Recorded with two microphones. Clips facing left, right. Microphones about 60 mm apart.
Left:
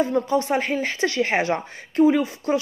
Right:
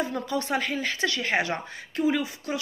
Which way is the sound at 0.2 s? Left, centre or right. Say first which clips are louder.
Left 7 dB; left.